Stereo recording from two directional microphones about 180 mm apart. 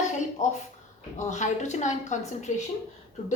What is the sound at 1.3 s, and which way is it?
A woman's voice, 40° left (ahead or behind).